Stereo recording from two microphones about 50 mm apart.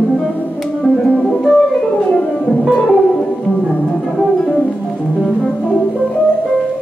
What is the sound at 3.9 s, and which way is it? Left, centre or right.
Music, centre.